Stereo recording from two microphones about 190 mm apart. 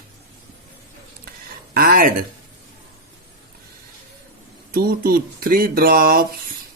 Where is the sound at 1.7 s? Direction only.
50° right (ahead or behind).